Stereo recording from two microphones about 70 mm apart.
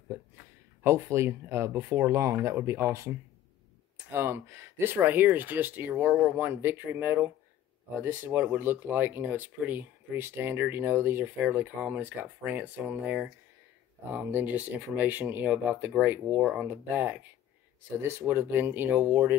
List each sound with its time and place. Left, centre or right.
0.8 s speech: right